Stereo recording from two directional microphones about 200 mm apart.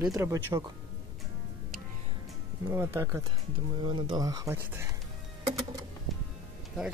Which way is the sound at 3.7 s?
25° right (ahead or behind).